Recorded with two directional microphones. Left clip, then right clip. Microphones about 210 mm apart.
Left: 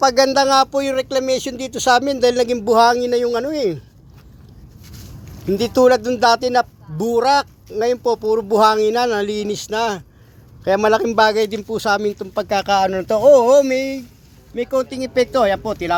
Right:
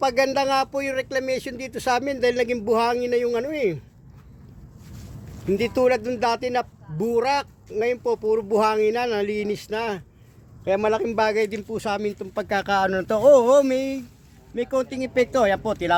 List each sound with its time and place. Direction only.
0.0 s speech: 15° left (ahead or behind)
5.5 s speech: 20° left (ahead or behind); by 16.0 s 5° right (ahead or behind)